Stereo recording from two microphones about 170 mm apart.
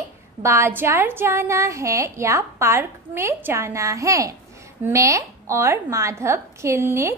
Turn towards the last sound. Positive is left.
turn(degrees=-15)  # may be behind; listen again after turning